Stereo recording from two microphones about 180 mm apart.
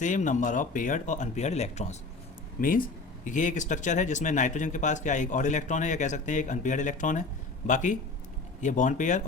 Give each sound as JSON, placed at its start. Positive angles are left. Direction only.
{"t": 0.0, "sound": "speech", "side_deg": 45}
{"t": 2.6, "sound": "speech", "side_deg": 50}